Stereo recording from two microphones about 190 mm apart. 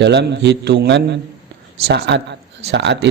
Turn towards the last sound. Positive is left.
turn(degrees=-65)  # may be behind; listen again after turning